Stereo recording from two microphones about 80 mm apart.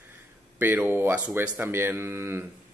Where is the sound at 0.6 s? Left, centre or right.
Right.